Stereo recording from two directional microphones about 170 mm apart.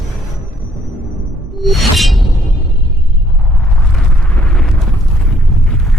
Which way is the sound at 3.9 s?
5° left (ahead or behind).